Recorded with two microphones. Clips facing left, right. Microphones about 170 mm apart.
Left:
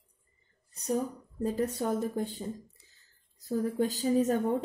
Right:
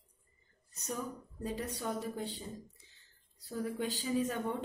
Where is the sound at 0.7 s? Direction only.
35° left (ahead or behind).